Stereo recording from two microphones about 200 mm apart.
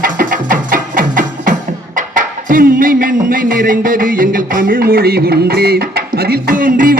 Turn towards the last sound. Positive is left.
turn(degrees=-45)  # may be behind; listen again after turning